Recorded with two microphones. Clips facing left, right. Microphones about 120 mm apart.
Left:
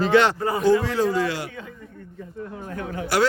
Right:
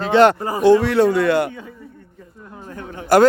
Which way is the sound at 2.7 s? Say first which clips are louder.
Left 3 dB; 30° right (ahead or behind).